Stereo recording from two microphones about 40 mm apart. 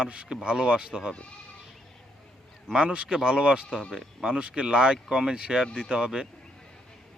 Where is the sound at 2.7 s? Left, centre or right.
Right.